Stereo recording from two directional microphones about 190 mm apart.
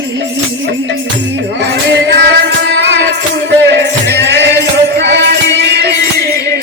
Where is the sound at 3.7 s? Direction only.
65° right (ahead or behind).